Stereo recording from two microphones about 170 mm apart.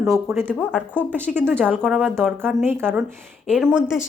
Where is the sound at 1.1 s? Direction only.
10° right (ahead or behind).